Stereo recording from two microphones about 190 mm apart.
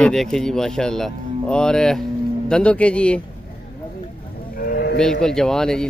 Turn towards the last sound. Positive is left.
turn(degrees=5)  # may be behind; listen again after turning